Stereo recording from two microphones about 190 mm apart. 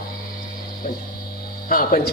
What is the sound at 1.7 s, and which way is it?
Speech, 50° left (ahead or behind).